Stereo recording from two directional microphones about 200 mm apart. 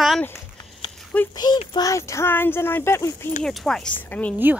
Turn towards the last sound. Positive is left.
turn(degrees=5)  # may be behind; listen again after turning